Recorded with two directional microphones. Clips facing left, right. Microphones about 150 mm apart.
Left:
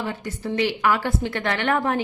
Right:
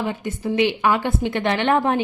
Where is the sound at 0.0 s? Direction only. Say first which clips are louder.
Right 4 dB; 20° right (ahead or behind).